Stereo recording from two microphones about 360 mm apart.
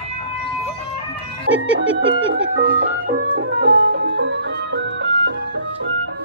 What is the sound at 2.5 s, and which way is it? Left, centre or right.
Music, right.